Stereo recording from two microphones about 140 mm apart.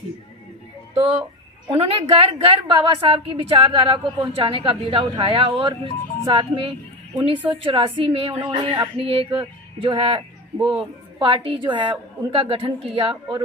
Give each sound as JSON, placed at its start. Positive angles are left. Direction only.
{"t": 0.9, "sound": "a woman's voice", "side_deg": -40}